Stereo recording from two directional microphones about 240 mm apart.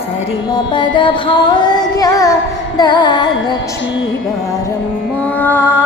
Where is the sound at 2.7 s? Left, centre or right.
Centre.